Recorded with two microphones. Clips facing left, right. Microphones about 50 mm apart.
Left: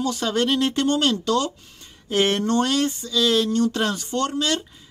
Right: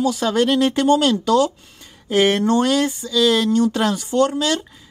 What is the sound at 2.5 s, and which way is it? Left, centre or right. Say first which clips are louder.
Speech: right 4 dB; centre.